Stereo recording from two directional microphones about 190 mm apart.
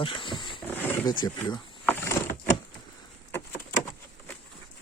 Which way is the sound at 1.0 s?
25° left (ahead or behind).